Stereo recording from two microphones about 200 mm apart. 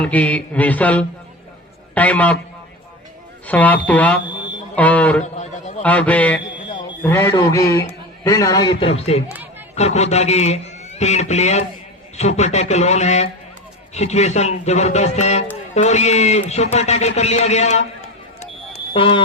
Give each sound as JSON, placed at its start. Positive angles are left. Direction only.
{"t": 0.0, "sound": "a man's voice", "side_deg": 5}
{"t": 3.4, "sound": "a man's voice", "side_deg": 10}
{"t": 5.2, "sound": "a man's voice", "side_deg": 35}
{"t": 5.8, "sound": "a man's voice", "side_deg": 5}
{"t": 18.9, "sound": "a man's voice", "side_deg": 25}